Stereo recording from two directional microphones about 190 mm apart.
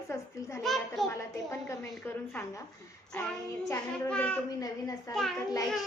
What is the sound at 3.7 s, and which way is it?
Speech, 5° left (ahead or behind).